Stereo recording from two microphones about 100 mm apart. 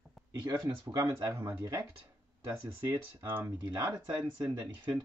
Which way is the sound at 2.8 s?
20° right (ahead or behind).